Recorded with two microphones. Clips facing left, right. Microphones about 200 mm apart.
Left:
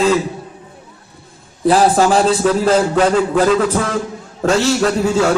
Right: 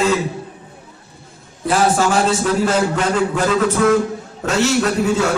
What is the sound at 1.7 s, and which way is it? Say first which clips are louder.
Speech: left 4 dB; 35° left (ahead or behind).